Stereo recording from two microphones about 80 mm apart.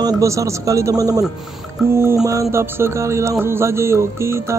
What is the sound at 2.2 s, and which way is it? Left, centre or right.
Speech, right.